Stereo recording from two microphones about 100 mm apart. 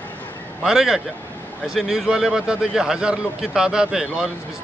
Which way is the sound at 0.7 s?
5° right (ahead or behind).